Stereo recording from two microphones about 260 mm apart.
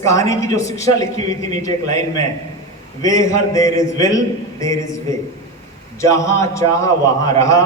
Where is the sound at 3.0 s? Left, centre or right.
Centre.